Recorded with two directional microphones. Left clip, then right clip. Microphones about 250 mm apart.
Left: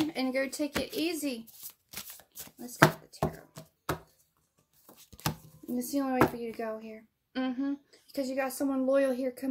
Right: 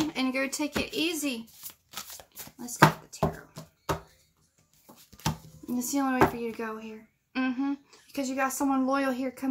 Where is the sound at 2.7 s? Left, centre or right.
Left.